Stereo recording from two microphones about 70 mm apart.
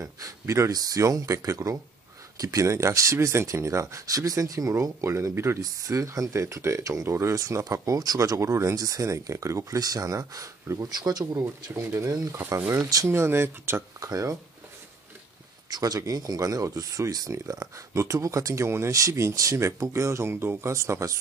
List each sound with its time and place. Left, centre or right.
0.0 s speech: right
5.6 s speech: right
8.4 s speech: right
11.3 s speech: right
13.9 s speech: right
15.7 s speech: right